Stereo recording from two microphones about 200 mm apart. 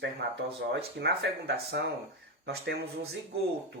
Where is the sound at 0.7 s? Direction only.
55° right (ahead or behind).